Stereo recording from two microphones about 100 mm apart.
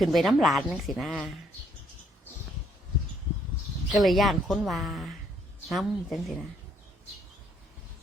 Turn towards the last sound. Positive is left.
turn(degrees=0)  # may be behind; listen again after turning